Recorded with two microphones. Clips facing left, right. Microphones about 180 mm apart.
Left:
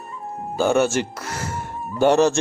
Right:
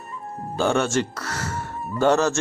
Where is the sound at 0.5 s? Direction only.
5° left (ahead or behind).